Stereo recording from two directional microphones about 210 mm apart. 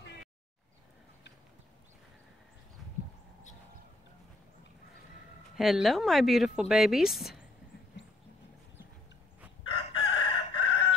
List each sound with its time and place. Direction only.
5.6 s speech: centre (ahead or behind)
9.7 s chicken: 25° left (ahead or behind)